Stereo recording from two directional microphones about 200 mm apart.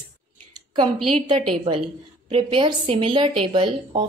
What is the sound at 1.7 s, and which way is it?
A woman's voice, 25° right (ahead or behind).